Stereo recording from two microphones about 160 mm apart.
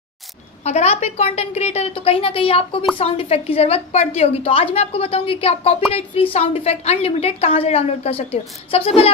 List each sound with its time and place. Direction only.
0.6 s a woman's voice: 45° left (ahead or behind)